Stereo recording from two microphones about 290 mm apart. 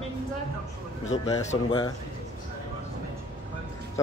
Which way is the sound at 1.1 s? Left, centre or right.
Centre.